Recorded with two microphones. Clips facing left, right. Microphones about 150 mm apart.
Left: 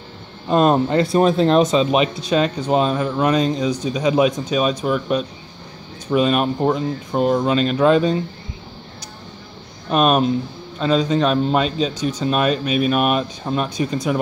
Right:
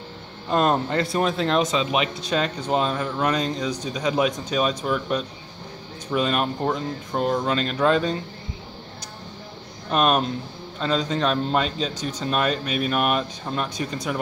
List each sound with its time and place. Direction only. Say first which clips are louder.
0.5 s a man's voice: left 6 dB; 20° left (ahead or behind)
1.1 s speech: left 8 dB; 35° left (ahead or behind)
2.2 s speech: left 6 dB; 20° left (ahead or behind)
9.8 s speech: left 5 dB; 15° left (ahead or behind)